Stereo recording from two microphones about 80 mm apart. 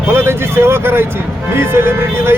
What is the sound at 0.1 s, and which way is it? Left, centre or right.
Speech, right.